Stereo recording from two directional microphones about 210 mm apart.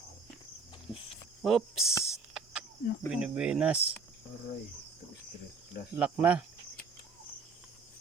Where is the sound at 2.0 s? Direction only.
Centre (ahead or behind).